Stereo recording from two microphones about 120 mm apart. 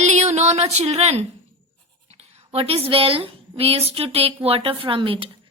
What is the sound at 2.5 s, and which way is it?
A woman's voice, 55° right (ahead or behind).